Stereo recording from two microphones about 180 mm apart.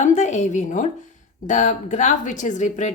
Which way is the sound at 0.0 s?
40° left (ahead or behind).